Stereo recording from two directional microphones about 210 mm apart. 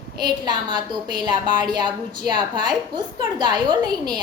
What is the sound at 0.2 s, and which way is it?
A woman's voice, 20° right (ahead or behind).